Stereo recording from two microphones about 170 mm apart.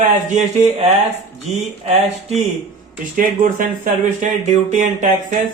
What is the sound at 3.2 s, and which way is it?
Speech, 50° right (ahead or behind).